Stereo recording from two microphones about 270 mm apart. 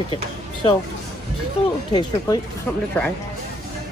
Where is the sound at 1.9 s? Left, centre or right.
Centre.